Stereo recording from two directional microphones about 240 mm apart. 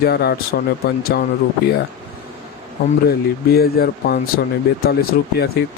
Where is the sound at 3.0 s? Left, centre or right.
Left.